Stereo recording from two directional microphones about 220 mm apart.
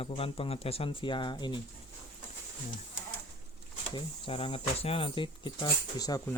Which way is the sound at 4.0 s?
25° left (ahead or behind).